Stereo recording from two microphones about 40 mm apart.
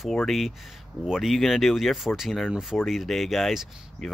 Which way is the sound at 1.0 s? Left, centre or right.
Centre.